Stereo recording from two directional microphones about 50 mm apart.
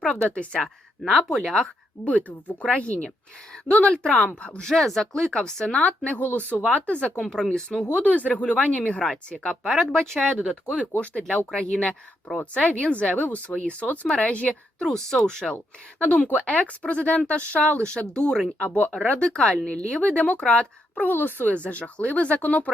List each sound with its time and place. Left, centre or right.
0.3 s speech: centre
1.0 s speech: centre
2.0 s speech: left
3.9 s speech: centre
7.2 s speech: centre
7.9 s speech: left
9.6 s speech: centre
10.4 s speech: centre
11.2 s speech: left
14.8 s speech: centre
16.0 s speech: left
21.0 s speech: left
21.5 s speech: left